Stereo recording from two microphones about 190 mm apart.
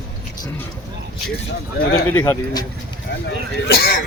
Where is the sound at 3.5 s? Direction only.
55° left (ahead or behind).